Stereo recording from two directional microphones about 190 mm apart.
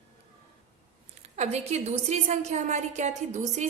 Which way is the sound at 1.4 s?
35° right (ahead or behind).